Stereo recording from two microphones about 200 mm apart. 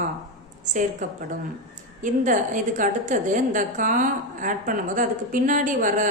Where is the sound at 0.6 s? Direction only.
40° right (ahead or behind).